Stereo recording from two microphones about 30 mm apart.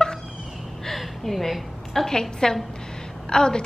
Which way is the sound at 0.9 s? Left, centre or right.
Centre.